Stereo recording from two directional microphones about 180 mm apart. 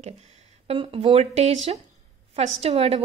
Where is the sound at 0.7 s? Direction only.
30° right (ahead or behind).